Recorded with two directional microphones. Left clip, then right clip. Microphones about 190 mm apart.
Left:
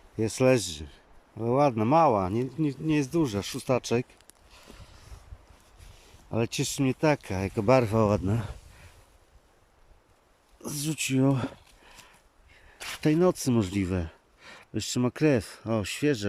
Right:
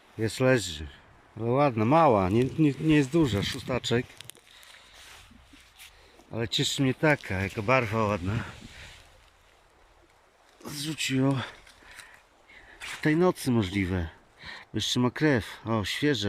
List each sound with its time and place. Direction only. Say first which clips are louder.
0.2 s speech: left 1 dB; 10° left (ahead or behind)
6.3 s speech: right 1 dB; 10° left (ahead or behind)
10.6 s speech: even; 15° left (ahead or behind)
13.0 s speech: left 1 dB; 10° left (ahead or behind)